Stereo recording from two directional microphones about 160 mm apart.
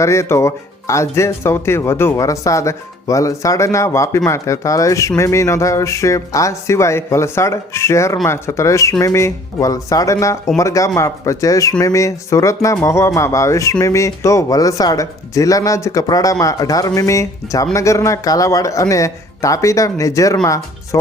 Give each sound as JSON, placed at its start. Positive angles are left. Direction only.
{"t": 0.0, "sound": "speech", "side_deg": 15}